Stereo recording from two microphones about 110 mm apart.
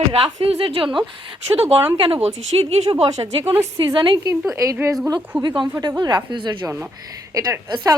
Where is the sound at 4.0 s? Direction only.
45° right (ahead or behind).